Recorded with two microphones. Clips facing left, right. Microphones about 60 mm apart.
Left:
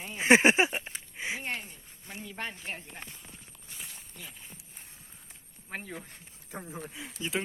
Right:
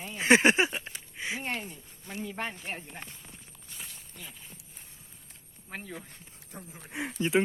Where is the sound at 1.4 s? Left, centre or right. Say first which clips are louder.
Right 2 dB; centre.